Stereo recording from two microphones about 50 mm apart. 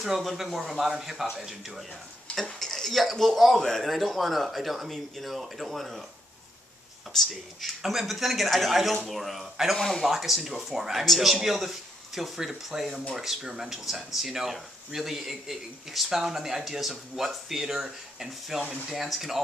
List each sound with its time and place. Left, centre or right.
0.0 s speech: centre
2.3 s a sound: left
2.6 s speech: centre
7.1 s speech: centre
7.8 s speech: centre
9.8 s speech: centre
10.0 s speech: centre